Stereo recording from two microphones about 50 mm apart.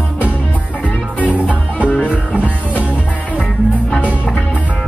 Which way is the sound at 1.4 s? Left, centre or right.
Left.